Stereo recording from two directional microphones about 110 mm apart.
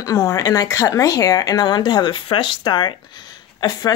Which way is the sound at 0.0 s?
30° left (ahead or behind).